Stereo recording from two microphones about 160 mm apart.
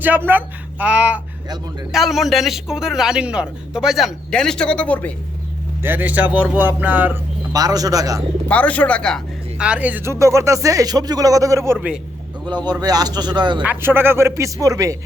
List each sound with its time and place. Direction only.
0.0 s a man's voice: 10° right (ahead or behind); by 5.1 s 10° left (ahead or behind)
5.8 s a man's voice: 10° right (ahead or behind)
7.5 s speech: 25° right (ahead or behind)
8.4 s speech: 10° left (ahead or behind)
9.6 s speech: 5° right (ahead or behind)
12.5 s speech: 25° right (ahead or behind)
13.6 s a man's voice: 10° right (ahead or behind)